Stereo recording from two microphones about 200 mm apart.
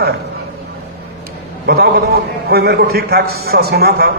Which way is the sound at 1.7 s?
50° right (ahead or behind).